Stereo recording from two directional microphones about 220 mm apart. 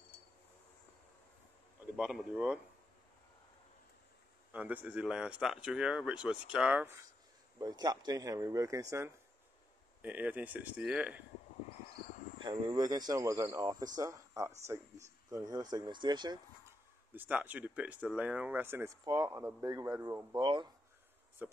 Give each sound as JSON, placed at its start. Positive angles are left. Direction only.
{"t": 2.0, "sound": "speech", "side_deg": -5}
{"t": 4.5, "sound": "speech", "side_deg": -5}
{"t": 10.0, "sound": "speech", "side_deg": -5}
{"t": 12.4, "sound": "speech", "side_deg": -20}
{"t": 17.1, "sound": "speech", "side_deg": -5}
{"t": 21.4, "sound": "speech", "side_deg": -10}